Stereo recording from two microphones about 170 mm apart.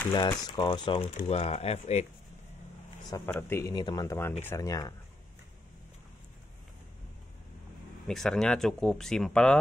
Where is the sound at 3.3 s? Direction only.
15° left (ahead or behind).